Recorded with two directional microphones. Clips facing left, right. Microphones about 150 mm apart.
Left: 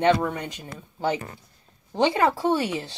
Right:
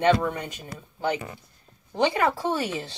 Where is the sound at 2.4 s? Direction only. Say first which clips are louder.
Left 3 dB; 25° left (ahead or behind).